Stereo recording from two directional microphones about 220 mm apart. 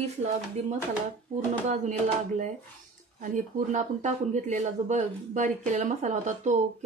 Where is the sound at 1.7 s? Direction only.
35° right (ahead or behind).